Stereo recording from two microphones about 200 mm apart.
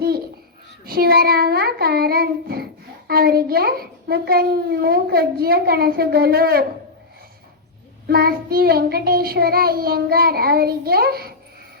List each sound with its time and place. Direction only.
0.9 s a child's voice: 50° right (ahead or behind)
8.0 s a child's voice: 50° right (ahead or behind)